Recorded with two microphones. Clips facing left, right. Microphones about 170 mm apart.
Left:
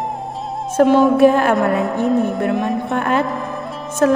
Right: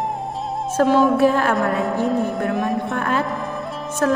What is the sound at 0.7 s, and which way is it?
Music, 20° left (ahead or behind).